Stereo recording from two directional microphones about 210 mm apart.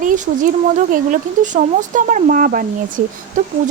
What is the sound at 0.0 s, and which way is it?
Speech, 40° right (ahead or behind).